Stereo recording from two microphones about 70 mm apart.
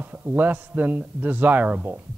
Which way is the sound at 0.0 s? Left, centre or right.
Right.